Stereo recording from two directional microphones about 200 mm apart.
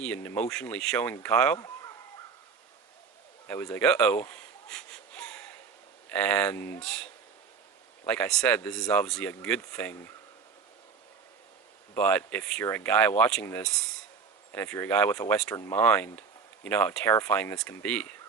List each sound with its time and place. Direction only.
0.0 s speech: 5° left (ahead or behind)
1.5 s speech: 20° left (ahead or behind)
3.4 s wheeze: 10° left (ahead or behind)
6.1 s speech: 5° left (ahead or behind)
11.9 s speech: 5° left (ahead or behind)